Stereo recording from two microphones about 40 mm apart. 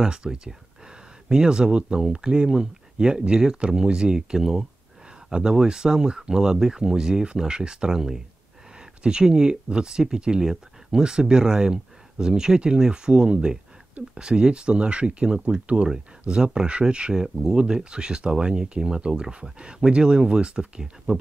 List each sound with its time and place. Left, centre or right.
0.0 s speech: centre
17.1 s speech: centre